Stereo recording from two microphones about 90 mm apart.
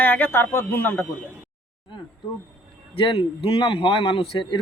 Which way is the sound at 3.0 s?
85° left.